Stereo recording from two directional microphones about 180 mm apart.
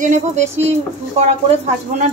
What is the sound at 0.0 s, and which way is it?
Speech, 40° right (ahead or behind).